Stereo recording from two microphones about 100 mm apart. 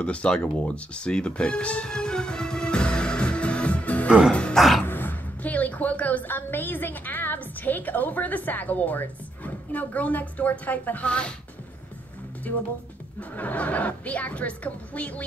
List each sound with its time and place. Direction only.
0.0 s music: 10° left (ahead or behind)
4.8 s a sound: 20° left (ahead or behind)
12.5 s a woman's voice: 20° left (ahead or behind)